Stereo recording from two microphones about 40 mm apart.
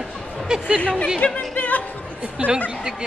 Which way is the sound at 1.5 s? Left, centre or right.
Left.